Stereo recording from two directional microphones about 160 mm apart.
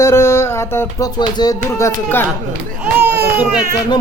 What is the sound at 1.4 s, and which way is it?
Speech, 20° left (ahead or behind).